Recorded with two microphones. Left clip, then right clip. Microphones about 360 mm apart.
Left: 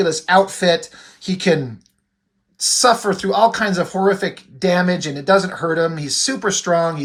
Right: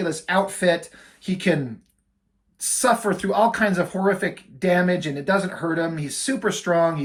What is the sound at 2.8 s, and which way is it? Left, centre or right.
Speech, centre.